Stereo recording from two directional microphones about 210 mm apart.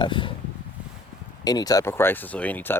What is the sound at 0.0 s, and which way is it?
Speech, 25° left (ahead or behind).